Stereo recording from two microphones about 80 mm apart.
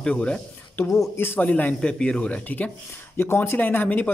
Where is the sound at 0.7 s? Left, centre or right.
Left.